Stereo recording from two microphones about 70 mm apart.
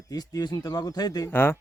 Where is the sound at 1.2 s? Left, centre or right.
Left.